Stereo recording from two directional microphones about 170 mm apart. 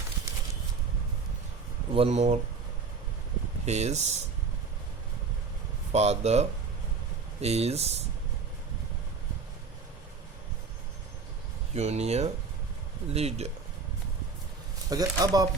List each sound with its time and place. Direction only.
1.9 s speech: 35° right (ahead or behind)
3.7 s speech: 40° right (ahead or behind)
5.9 s speech: 40° right (ahead or behind)
7.4 s speech: 40° right (ahead or behind)
11.7 s speech: 40° right (ahead or behind)
14.8 s speech: 20° right (ahead or behind)